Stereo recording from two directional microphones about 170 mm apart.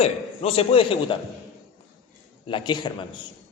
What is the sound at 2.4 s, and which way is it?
Speech, 30° left (ahead or behind).